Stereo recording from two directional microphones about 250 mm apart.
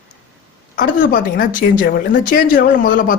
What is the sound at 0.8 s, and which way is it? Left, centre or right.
Speech, left.